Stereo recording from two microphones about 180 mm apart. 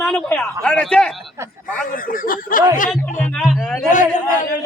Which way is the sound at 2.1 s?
50° left (ahead or behind).